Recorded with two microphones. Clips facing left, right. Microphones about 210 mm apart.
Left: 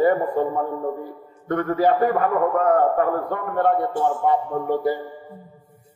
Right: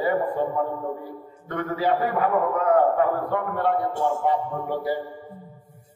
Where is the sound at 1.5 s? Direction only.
50° left (ahead or behind).